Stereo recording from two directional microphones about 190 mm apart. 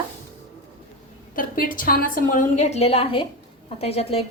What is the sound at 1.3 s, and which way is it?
A woman's voice, 45° left (ahead or behind).